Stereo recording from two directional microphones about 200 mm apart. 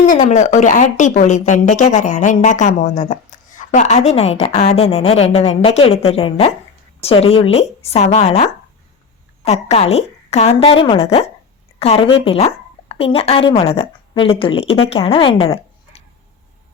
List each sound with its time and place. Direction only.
0.0 s a woman's voice: 40° left (ahead or behind)